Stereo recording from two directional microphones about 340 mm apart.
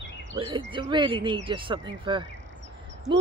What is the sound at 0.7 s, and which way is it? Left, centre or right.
Speech, centre.